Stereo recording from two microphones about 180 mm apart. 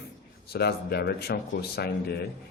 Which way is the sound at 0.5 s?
65° left (ahead or behind).